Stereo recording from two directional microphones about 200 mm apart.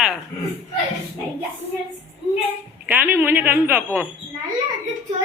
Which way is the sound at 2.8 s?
10° right (ahead or behind).